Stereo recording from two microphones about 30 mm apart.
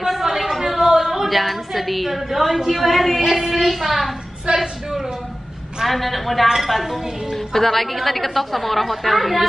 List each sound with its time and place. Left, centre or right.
0.0 s a sound: centre
1.3 s a woman's voice: centre
4.5 s a woman's voice: right
5.9 s a woman's voice: centre
7.3 s a woman's voice: centre